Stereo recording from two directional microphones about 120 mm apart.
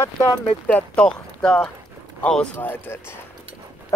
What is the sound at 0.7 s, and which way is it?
Speech, 10° left (ahead or behind).